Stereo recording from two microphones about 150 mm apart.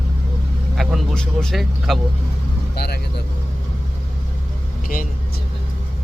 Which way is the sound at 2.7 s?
90° left.